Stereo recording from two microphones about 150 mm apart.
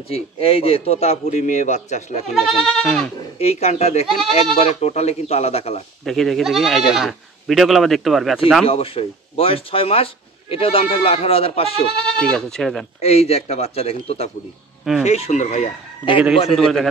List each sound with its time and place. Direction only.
0.1 s a man's voice: 40° left (ahead or behind)
2.3 s speech: centre (ahead or behind)
3.3 s a man's voice: 45° left (ahead or behind)
6.0 s speech: centre (ahead or behind)
8.6 s speech: 40° left (ahead or behind)
12.2 s speech: centre (ahead or behind)
13.0 s a man's voice: 45° left (ahead or behind)
16.5 s speech: centre (ahead or behind)